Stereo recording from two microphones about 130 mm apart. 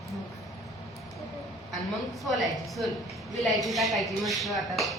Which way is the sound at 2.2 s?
Centre (ahead or behind).